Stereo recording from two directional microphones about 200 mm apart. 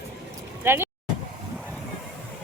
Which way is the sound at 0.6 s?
10° right (ahead or behind).